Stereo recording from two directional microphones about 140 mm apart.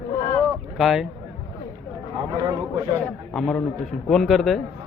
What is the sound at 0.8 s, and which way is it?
Speech, 5° right (ahead or behind).